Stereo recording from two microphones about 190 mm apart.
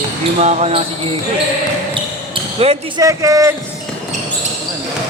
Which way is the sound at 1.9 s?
30° right (ahead or behind).